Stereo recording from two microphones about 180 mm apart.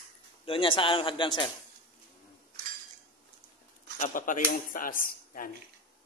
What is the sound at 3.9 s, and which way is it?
Speech, 45° left (ahead or behind).